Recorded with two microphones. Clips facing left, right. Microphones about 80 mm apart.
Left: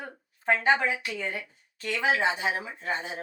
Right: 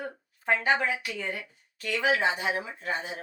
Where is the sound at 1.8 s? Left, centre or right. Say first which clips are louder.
Even; left.